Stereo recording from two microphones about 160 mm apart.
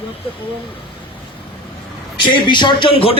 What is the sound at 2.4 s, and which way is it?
Speech, 30° left (ahead or behind).